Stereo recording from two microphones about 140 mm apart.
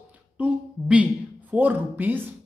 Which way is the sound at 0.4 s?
10° right (ahead or behind).